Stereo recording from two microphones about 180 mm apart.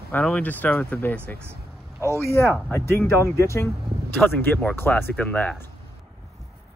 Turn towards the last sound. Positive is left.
turn(degrees=10)  # may be behind; listen again after turning